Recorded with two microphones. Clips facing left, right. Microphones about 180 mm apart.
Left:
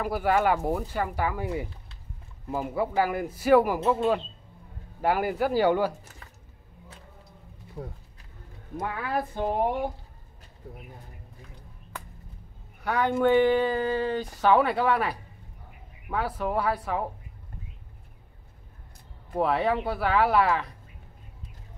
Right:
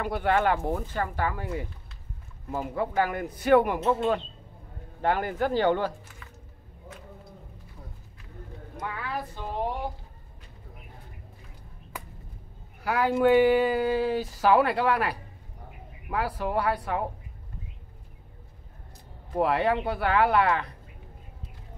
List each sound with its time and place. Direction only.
0.0 s speech: 5° left (ahead or behind)
8.7 s speech: 50° left (ahead or behind)
12.8 s speech: 5° right (ahead or behind)
19.3 s speech: centre (ahead or behind)